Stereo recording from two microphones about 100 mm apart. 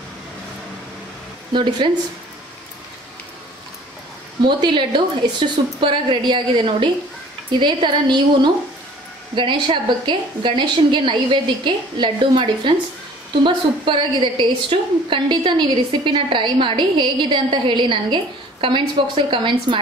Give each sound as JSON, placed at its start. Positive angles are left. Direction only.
{"t": 1.5, "sound": "a woman's voice", "side_deg": -55}
{"t": 4.5, "sound": "a woman's voice", "side_deg": -50}